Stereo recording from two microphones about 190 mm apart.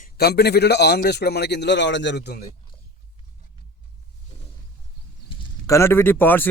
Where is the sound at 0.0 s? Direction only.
55° left (ahead or behind).